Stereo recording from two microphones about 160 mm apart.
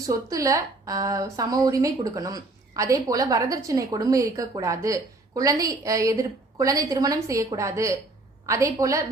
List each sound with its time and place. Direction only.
0.0 s a woman's voice: 20° right (ahead or behind)